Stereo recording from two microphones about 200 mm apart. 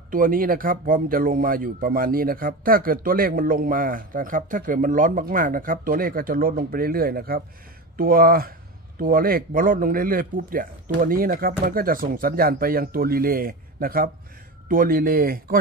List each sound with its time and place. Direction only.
0.1 s speech: 45° right (ahead or behind)